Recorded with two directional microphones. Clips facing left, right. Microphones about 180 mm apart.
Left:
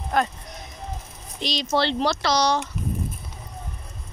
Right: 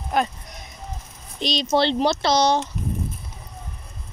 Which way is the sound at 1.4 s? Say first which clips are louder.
Right 3 dB; 20° right (ahead or behind).